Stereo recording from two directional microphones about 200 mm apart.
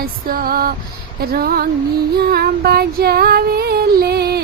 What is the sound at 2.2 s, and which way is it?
Female singing, 50° right (ahead or behind).